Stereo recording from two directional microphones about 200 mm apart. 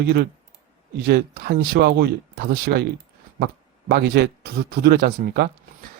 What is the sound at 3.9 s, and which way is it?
Speech, 50° right (ahead or behind).